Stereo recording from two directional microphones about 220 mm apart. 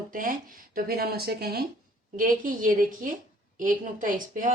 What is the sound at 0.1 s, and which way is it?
A woman's voice, 40° right (ahead or behind).